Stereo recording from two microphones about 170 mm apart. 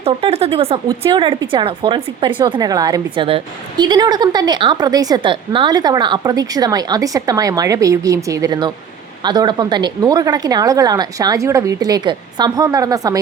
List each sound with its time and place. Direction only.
0.0 s a woman's voice: 35° right (ahead or behind)